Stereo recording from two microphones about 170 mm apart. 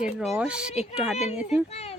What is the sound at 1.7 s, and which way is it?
Speech, 40° left (ahead or behind).